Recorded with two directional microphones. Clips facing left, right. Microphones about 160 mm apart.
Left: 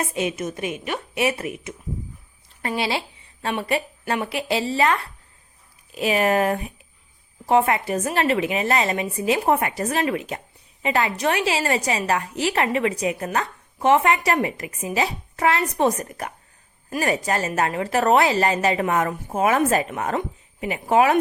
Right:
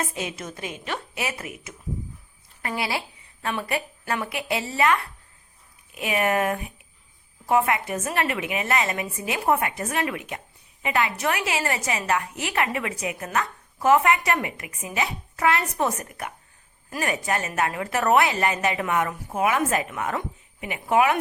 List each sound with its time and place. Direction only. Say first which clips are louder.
0.0 s a woman's voice: left 6 dB; 25° left (ahead or behind)
2.6 s a sound: left 4 dB; 30° left (ahead or behind)
3.6 s a woman's voice: left 4 dB; 30° left (ahead or behind)